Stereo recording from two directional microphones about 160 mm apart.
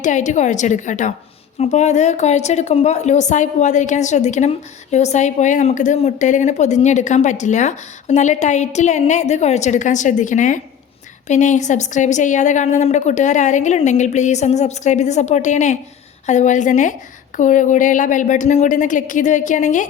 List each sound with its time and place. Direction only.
0.0 s a woman's voice: 50° left (ahead or behind)